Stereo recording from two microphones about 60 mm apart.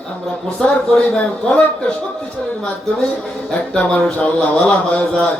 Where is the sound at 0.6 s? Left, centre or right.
Centre.